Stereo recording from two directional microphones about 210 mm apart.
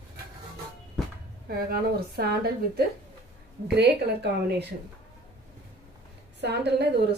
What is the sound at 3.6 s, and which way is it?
A woman's voice, 50° right (ahead or behind).